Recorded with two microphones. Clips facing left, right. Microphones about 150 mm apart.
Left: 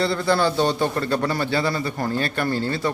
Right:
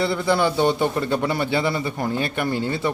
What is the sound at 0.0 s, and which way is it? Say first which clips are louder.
A man's voice: even; 15° right (ahead or behind).